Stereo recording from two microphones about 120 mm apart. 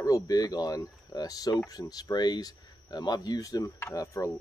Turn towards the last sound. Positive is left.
turn(degrees=25)  # may be behind; listen again after turning